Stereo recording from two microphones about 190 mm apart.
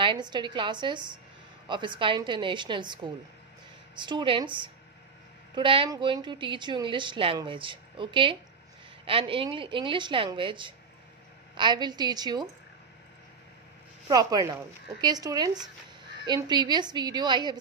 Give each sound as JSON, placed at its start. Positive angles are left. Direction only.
{"t": 0.0, "sound": "a woman's voice", "side_deg": -25}
{"t": 14.0, "sound": "a woman's voice", "side_deg": -20}